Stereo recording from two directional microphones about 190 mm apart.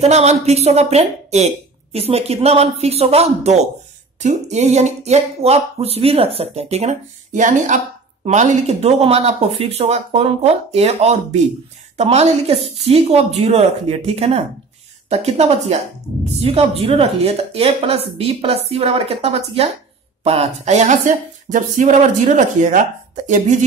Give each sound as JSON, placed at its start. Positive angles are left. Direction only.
{"t": 0.0, "sound": "speech", "side_deg": -35}